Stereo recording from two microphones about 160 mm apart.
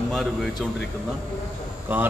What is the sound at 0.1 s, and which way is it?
Speech, centre (ahead or behind).